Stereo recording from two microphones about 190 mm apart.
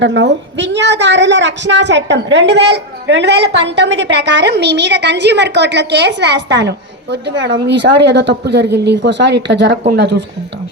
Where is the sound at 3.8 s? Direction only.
75° right (ahead or behind).